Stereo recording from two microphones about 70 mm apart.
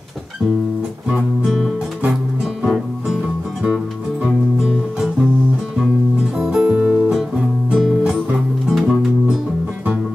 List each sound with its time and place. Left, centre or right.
1.1 s guitar: centre
3.6 s music: centre
6.3 s music: centre
6.7 s music: right
7.7 s music: centre